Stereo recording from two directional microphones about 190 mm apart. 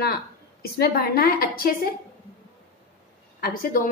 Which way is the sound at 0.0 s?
55° left (ahead or behind).